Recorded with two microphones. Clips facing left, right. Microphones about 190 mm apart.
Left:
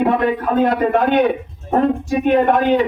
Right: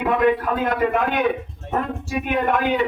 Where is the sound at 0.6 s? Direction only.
35° left (ahead or behind).